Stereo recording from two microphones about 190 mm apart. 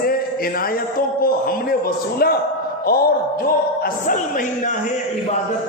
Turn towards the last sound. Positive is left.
turn(degrees=50)  # may be behind; listen again after turning